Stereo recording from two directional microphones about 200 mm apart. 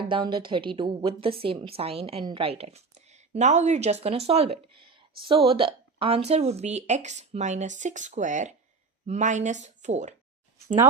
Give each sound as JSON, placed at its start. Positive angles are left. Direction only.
{"t": 0.1, "sound": "a woman's voice", "side_deg": -25}